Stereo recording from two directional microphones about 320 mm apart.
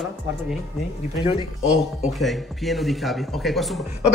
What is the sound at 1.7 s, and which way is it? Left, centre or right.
A man's voice, centre.